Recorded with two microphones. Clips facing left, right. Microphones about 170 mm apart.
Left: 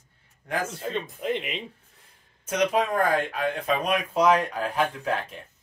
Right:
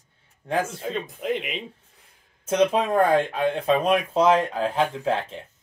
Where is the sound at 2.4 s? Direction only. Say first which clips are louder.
Right 3 dB; 30° right (ahead or behind).